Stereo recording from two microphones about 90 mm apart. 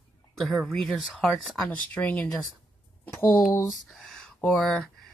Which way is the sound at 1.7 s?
15° left (ahead or behind).